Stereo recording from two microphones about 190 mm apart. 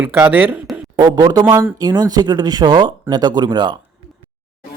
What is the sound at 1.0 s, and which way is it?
Speech, 20° right (ahead or behind).